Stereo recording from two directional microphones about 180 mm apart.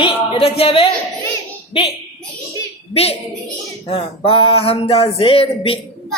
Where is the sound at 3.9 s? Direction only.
30° left (ahead or behind).